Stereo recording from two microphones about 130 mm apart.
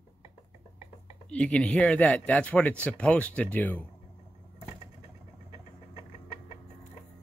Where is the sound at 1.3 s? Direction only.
10° left (ahead or behind).